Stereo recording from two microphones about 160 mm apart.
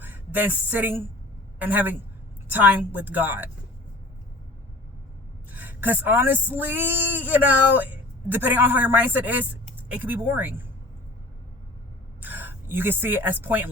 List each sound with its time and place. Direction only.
0.0 s a woman's voice: 10° right (ahead or behind)
5.5 s a woman's voice: 10° right (ahead or behind)
12.2 s a woman's voice: 10° right (ahead or behind)